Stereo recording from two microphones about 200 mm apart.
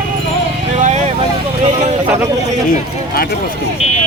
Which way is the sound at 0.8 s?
35° right (ahead or behind).